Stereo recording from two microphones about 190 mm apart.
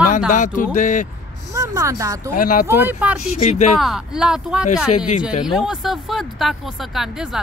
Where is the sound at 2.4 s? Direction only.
45° left (ahead or behind).